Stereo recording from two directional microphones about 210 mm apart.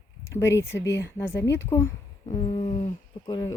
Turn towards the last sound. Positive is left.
turn(degrees=20)  # may be behind; listen again after turning